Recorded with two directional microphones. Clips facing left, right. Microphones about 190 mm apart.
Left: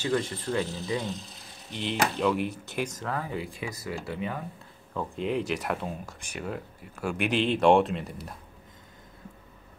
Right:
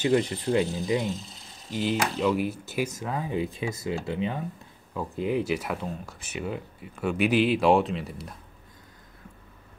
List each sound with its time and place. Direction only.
0.0 s speech: 20° right (ahead or behind)
1.7 s speech: 5° right (ahead or behind); by 4.4 s 25° right (ahead or behind)
4.9 s speech: 5° right (ahead or behind)